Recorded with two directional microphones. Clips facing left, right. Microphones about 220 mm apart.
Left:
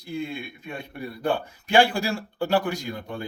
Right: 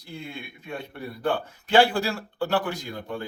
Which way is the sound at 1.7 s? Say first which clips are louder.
Even; 10° left (ahead or behind).